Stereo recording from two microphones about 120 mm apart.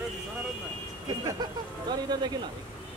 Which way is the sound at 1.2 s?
35° right (ahead or behind).